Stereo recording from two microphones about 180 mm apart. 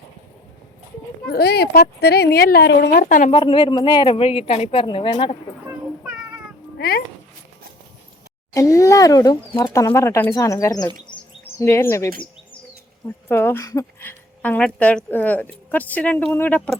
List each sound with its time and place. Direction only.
1.3 s speech: 60° left (ahead or behind)
3.3 s speech: 25° left (ahead or behind)
5.6 s a sound: 5° right (ahead or behind)
6.7 s speech: 60° left (ahead or behind)
8.5 s speech: 15° left (ahead or behind)
13.2 s speech: 10° left (ahead or behind)